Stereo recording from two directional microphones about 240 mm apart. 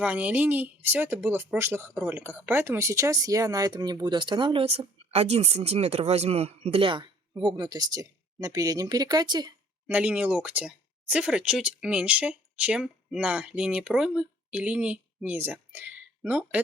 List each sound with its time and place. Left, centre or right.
0.0 s speech: centre
9.8 s speech: centre